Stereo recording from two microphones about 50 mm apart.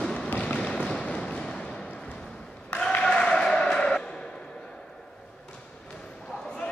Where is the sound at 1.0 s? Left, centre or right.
Centre.